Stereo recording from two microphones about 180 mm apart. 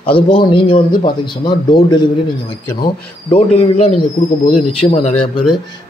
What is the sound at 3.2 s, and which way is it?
A man's voice, 35° left (ahead or behind).